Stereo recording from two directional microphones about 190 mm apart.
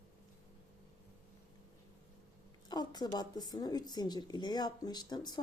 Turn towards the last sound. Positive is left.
turn(degrees=20)  # may be behind; listen again after turning